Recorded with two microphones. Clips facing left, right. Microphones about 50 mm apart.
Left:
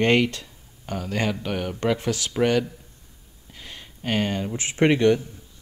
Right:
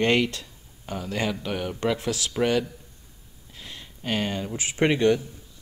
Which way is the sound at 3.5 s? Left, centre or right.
Left.